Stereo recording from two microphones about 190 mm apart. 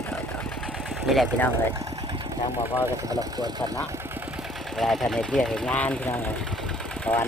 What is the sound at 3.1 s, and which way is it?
Speech, 20° right (ahead or behind).